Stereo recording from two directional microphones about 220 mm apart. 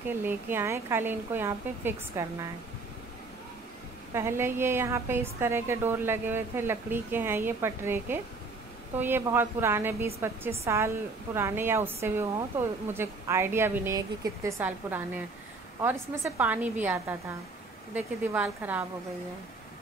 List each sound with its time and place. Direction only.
0.2 s a woman's voice: 10° right (ahead or behind)
4.1 s a woman's voice: 10° right (ahead or behind)